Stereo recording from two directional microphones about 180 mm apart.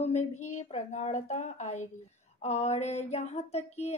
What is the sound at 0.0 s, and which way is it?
Speech, 40° left (ahead or behind).